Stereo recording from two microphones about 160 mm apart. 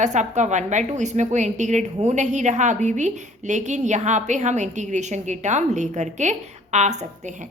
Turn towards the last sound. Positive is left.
turn(degrees=-45)  # may be behind; listen again after turning